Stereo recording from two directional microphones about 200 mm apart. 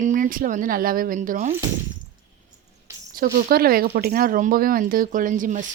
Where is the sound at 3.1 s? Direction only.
50° right (ahead or behind).